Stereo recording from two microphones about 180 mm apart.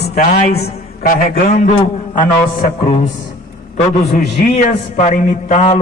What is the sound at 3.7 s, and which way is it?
A man's voice, 60° left (ahead or behind).